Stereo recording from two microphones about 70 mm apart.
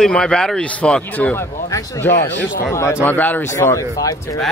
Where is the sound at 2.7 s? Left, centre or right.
Left.